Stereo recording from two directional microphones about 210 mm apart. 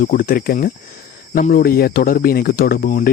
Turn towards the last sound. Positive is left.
turn(degrees=40)  # may be behind; listen again after turning